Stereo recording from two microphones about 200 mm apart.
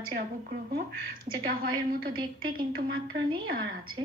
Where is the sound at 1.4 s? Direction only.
45° right (ahead or behind).